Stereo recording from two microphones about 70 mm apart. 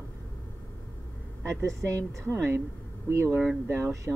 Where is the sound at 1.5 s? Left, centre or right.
Right.